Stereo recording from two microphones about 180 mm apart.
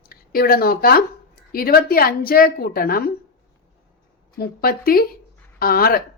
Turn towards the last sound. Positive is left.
turn(degrees=55)  # may be behind; listen again after turning